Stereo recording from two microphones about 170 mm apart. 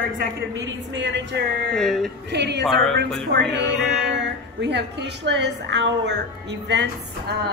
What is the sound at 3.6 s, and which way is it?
A woman's voice, 90° right.